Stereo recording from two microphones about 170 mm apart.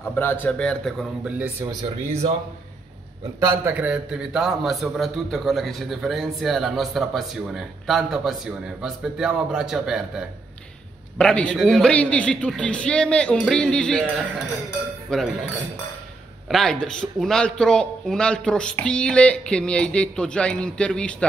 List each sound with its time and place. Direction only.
0.0 s a man's voice: 10° left (ahead or behind); by 1.5 s 5° right (ahead or behind)
1.6 s speech: 20° right (ahead or behind)
3.3 s a man's voice: 15° right (ahead or behind); by 15.3 s centre (ahead or behind)
16.4 s a man's voice: centre (ahead or behind)